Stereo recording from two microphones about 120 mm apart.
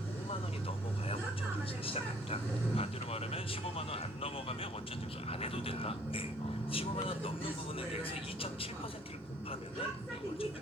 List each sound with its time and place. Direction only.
1.9 s speech: 55° left (ahead or behind)